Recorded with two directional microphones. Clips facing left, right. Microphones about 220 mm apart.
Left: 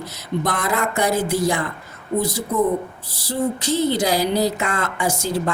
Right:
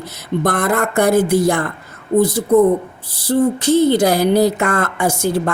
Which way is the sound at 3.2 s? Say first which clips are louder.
Right 7 dB; 55° right (ahead or behind).